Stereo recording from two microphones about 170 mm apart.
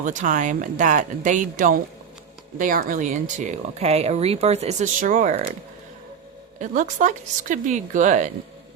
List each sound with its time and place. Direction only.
0.0 s speech: 45° right (ahead or behind)
6.6 s speech: 45° right (ahead or behind)